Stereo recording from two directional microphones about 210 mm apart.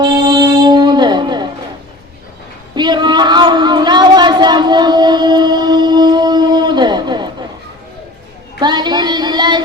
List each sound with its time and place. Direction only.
0.0 s music: 20° right (ahead or behind)
2.7 s a sound: 20° right (ahead or behind)
8.6 s child singing: 20° right (ahead or behind)